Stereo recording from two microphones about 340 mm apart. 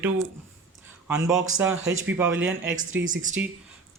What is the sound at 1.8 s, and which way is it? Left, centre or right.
Speech, right.